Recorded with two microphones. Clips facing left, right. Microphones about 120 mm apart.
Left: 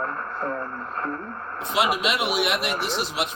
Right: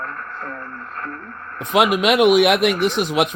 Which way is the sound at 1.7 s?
55° right (ahead or behind).